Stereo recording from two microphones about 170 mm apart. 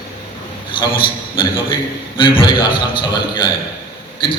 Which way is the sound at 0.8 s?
30° left (ahead or behind).